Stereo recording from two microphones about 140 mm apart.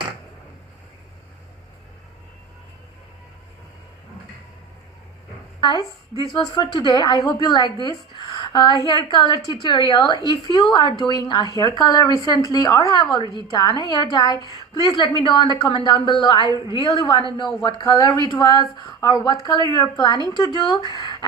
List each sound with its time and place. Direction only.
5.6 s a woman's voice: 30° left (ahead or behind)